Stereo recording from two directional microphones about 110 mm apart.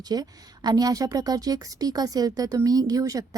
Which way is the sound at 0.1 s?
35° right (ahead or behind).